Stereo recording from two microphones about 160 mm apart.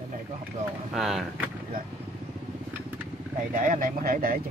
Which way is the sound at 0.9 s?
Centre (ahead or behind).